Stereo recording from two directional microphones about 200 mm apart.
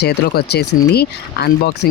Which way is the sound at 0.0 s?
55° left (ahead or behind).